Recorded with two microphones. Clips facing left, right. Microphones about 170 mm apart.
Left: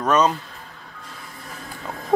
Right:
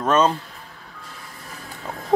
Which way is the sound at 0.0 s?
25° right (ahead or behind).